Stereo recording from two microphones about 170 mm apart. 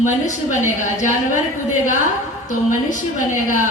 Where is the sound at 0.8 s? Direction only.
45° left (ahead or behind).